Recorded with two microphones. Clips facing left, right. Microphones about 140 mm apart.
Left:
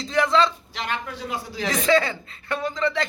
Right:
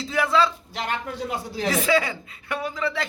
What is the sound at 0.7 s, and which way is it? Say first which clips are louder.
Speech: right 1 dB; 45° right (ahead or behind).